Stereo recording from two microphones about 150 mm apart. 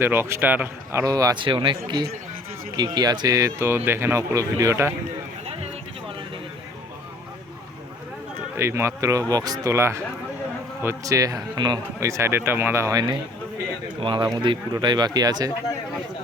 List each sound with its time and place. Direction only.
0.0 s speech: 15° right (ahead or behind)
1.0 s speech: 25° right (ahead or behind)
8.5 s speech: 15° right (ahead or behind)